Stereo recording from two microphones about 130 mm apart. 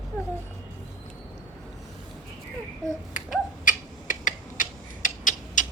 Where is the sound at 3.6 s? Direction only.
90° left.